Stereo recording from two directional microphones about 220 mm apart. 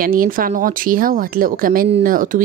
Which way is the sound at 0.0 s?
40° right (ahead or behind).